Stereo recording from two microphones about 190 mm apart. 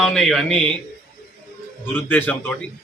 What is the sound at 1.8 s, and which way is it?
Speech, 10° left (ahead or behind).